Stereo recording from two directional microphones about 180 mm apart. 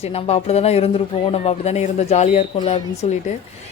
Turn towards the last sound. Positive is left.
turn(degrees=40)  # may be behind; listen again after turning